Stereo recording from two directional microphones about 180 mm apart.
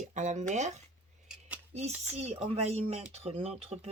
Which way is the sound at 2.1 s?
35° right (ahead or behind).